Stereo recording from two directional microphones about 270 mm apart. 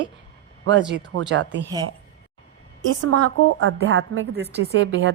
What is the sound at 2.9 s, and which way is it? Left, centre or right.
A woman's voice, right.